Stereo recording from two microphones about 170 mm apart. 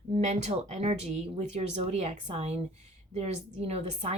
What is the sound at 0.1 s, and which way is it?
Speech, 40° right (ahead or behind).